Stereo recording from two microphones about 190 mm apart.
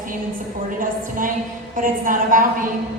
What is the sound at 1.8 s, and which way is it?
Speech, 45° right (ahead or behind).